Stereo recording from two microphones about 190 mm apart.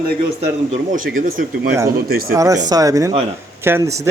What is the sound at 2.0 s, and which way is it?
Speech, 55° right (ahead or behind).